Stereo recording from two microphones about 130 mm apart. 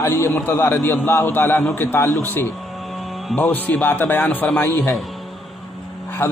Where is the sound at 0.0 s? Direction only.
25° left (ahead or behind).